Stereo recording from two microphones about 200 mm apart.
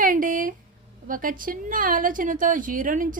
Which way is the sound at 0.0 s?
40° right (ahead or behind).